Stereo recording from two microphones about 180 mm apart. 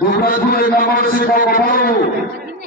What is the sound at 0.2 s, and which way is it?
A man's voice, 55° left (ahead or behind).